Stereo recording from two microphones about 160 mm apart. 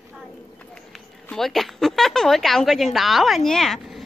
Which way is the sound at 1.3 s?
Centre (ahead or behind).